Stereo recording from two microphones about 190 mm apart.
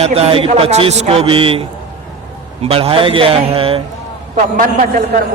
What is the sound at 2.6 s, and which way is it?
A man's voice, 30° right (ahead or behind).